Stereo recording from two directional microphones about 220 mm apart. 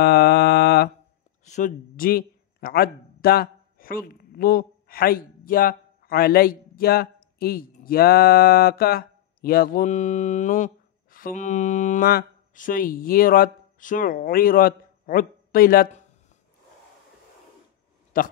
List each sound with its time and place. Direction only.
0.0 s mantra: 50° left (ahead or behind)
1.4 s speech: 35° left (ahead or behind)
18.1 s speech: 35° left (ahead or behind)